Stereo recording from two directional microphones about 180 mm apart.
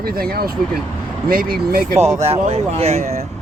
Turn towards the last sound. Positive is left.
turn(degrees=-35)  # may be behind; listen again after turning